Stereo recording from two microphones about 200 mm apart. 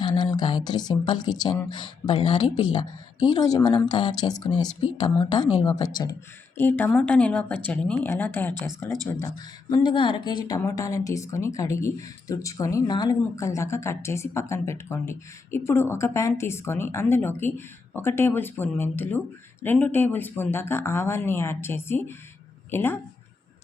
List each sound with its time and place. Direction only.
0.0 s speech: 20° left (ahead or behind)